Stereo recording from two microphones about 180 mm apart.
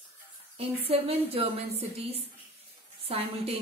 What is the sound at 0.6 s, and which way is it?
A woman's voice, 35° right (ahead or behind).